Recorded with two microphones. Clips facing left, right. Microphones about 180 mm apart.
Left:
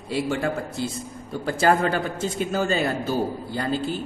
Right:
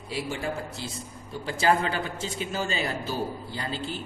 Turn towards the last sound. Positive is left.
turn(degrees=50)  # may be behind; listen again after turning